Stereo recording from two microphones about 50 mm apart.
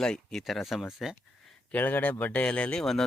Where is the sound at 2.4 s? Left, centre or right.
Left.